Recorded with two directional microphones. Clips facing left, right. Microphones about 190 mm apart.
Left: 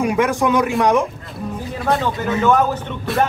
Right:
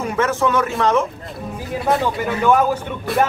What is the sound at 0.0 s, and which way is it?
Speech, 15° left (ahead or behind).